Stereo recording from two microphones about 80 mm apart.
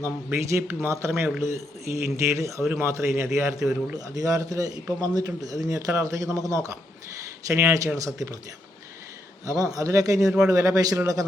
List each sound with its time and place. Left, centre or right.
0.0 s a man's voice: right
3.9 s a man's voice: right
9.7 s a man's voice: right